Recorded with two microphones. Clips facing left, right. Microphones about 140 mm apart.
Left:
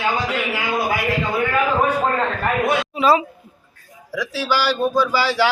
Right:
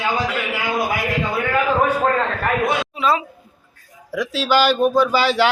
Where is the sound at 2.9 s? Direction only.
5° left (ahead or behind).